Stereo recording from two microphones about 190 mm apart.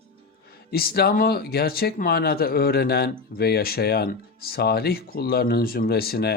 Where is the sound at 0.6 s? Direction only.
55° left (ahead or behind).